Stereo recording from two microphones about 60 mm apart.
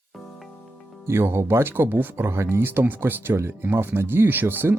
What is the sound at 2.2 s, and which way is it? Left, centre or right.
Speech, right.